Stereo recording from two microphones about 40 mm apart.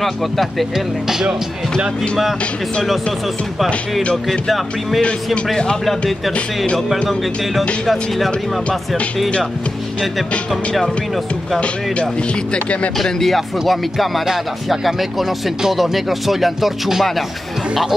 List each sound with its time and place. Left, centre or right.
0.0 s speech: centre
0.7 s speech: centre
5.9 s speech: centre
8.3 s speech: left
12.5 s speech: left
13.0 s speech: centre